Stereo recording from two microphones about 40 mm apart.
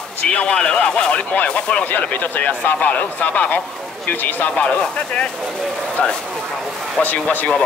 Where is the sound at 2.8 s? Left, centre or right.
Left.